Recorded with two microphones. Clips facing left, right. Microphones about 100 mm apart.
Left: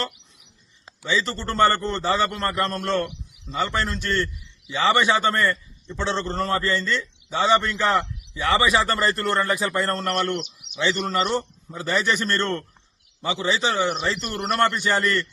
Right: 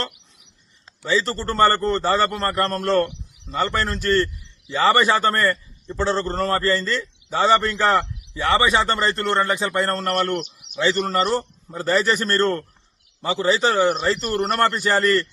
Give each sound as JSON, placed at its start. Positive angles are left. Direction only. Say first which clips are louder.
{"t": 1.4, "sound": "a man's voice", "louder": "right 1 dB", "side_deg": -40}